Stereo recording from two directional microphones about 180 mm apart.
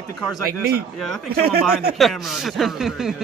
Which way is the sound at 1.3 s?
60° right (ahead or behind).